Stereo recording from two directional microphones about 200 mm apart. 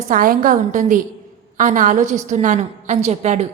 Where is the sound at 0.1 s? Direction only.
45° right (ahead or behind).